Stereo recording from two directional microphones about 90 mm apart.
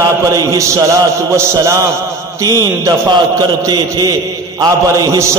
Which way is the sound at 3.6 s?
45° right (ahead or behind).